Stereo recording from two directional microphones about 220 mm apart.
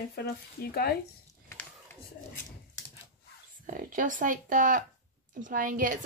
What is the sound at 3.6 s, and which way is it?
Speech, 35° right (ahead or behind).